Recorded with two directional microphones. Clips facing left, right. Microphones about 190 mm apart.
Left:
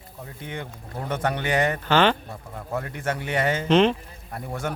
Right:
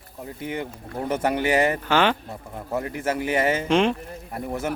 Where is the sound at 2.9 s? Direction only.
5° right (ahead or behind).